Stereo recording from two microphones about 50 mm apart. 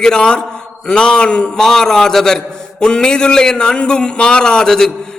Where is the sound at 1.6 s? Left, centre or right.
Centre.